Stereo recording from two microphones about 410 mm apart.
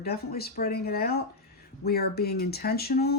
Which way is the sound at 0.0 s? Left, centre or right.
Left.